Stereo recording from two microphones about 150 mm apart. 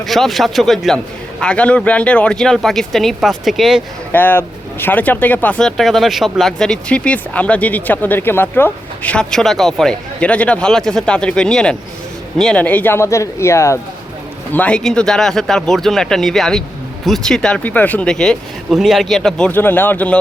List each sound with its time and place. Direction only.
0.0 s a man's voice: centre (ahead or behind)
4.1 s a man's voice: 15° left (ahead or behind)